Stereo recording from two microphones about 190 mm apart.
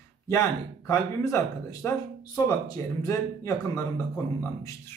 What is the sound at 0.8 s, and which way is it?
Speech, 15° left (ahead or behind).